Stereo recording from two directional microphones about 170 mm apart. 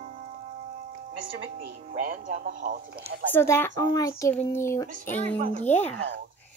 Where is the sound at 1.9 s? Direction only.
50° right (ahead or behind).